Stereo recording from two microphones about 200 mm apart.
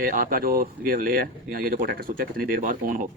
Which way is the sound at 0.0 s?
45° right (ahead or behind).